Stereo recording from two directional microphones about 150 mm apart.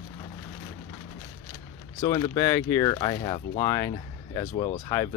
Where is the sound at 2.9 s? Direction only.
30° left (ahead or behind).